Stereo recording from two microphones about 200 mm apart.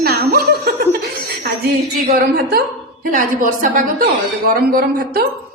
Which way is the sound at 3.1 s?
40° right (ahead or behind).